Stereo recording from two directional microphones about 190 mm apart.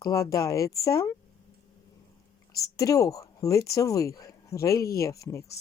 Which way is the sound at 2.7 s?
20° left (ahead or behind).